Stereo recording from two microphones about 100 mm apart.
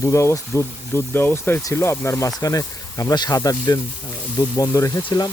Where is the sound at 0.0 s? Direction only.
30° left (ahead or behind).